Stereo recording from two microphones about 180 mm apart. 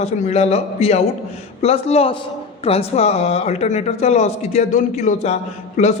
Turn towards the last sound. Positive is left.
turn(degrees=40)  # may be behind; listen again after turning